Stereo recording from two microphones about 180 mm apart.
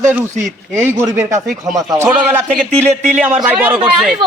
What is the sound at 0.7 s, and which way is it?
A woman's voice, 10° right (ahead or behind).